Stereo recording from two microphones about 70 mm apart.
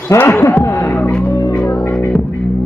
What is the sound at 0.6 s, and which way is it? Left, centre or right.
Music, left.